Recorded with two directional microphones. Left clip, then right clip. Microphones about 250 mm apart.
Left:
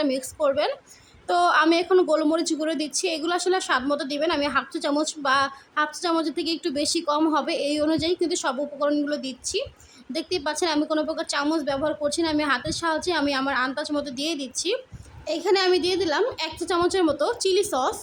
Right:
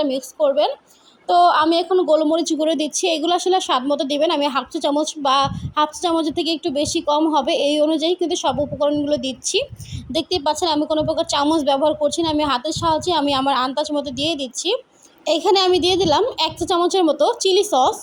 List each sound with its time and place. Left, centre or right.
0.0 s a woman's voice: centre